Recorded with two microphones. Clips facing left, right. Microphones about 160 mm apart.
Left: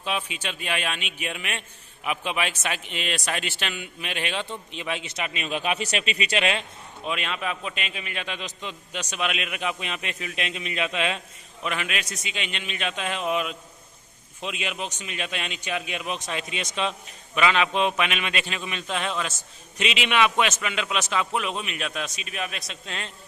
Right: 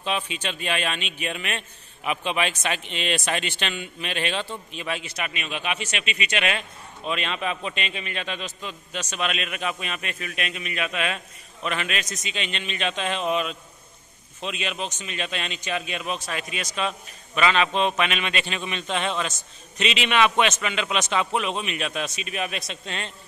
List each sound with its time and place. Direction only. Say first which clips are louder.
0.0 s a man's voice: right 2 dB; 10° left (ahead or behind); by 6.6 s 30° left (ahead or behind)
7.1 s a man's voice: right 2 dB; 5° left (ahead or behind); by 11.1 s 25° left (ahead or behind)
11.6 s a man's voice: right 1 dB; 10° left (ahead or behind)